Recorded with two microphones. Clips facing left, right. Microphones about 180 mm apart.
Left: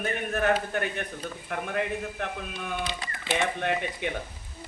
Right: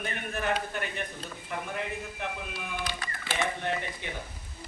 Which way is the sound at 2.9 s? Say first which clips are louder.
Left 2 dB; 20° left (ahead or behind).